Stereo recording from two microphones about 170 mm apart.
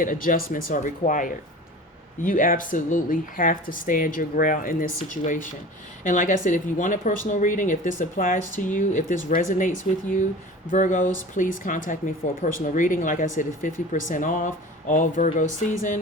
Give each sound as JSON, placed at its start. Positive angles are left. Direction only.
{"t": 0.0, "sound": "speech", "side_deg": 55}